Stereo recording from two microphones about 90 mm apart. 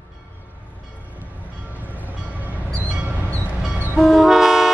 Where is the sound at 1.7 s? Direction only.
20° right (ahead or behind).